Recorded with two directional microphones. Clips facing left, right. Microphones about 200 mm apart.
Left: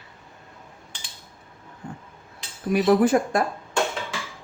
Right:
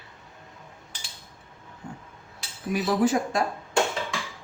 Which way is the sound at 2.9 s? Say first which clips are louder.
Left 5 dB; 55° left (ahead or behind).